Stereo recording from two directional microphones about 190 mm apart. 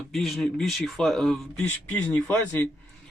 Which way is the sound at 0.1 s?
Centre (ahead or behind).